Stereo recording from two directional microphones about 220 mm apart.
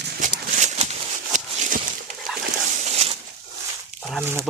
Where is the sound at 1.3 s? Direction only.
35° right (ahead or behind).